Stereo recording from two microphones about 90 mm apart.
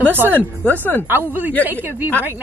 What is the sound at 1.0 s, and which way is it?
A woman's voice, 20° right (ahead or behind).